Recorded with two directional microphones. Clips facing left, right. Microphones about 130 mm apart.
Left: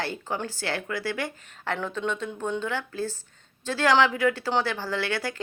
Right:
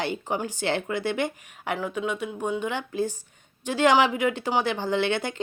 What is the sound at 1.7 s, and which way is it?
Speech, 10° right (ahead or behind).